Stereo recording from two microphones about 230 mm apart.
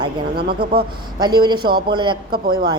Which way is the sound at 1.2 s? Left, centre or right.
Centre.